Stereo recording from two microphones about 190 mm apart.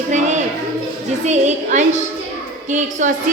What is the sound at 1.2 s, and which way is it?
A woman's voice, 40° right (ahead or behind).